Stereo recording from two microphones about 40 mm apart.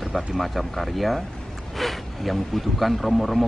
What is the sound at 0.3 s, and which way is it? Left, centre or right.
Speech, centre.